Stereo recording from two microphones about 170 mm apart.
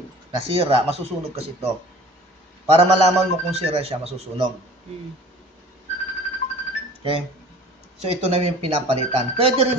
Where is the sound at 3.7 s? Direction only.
35° right (ahead or behind).